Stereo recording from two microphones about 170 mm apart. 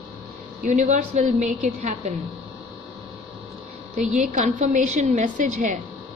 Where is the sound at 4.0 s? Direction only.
45° right (ahead or behind).